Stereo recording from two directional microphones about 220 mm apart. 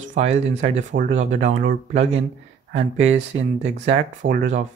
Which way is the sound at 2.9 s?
60° right (ahead or behind).